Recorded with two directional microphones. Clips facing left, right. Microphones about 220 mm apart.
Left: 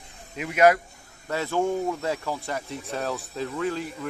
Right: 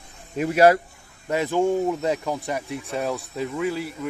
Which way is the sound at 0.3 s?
40° right (ahead or behind).